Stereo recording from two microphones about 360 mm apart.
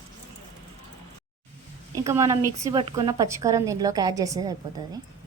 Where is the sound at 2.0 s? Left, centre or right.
Centre.